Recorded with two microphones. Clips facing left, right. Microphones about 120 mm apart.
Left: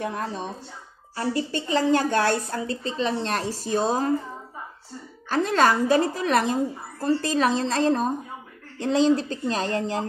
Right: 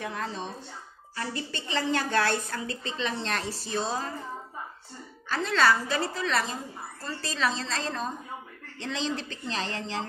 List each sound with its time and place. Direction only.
0.0 s speech: 50° left (ahead or behind)
1.1 s speech: 30° left (ahead or behind)
1.5 s a woman's voice: 45° left (ahead or behind)
5.3 s speech: 45° left (ahead or behind)